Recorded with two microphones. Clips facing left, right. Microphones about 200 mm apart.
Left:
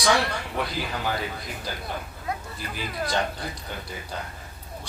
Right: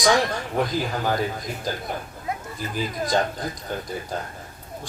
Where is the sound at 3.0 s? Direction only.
45° right (ahead or behind).